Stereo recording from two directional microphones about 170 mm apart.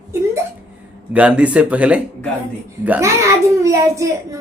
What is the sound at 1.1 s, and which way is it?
A child's voice, 10° right (ahead or behind).